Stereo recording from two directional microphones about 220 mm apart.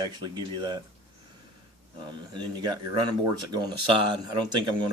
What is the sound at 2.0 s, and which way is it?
Speech, 20° right (ahead or behind).